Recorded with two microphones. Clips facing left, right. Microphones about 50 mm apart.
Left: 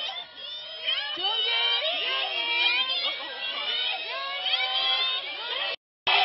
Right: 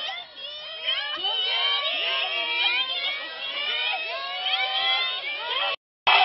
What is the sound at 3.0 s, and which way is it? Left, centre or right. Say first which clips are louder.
Crowd: right 1 dB; right.